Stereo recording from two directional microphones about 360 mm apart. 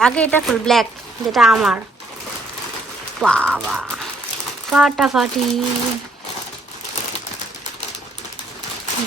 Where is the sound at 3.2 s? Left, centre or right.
Centre.